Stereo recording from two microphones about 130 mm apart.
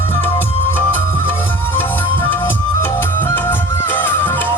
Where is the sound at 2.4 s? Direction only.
15° left (ahead or behind).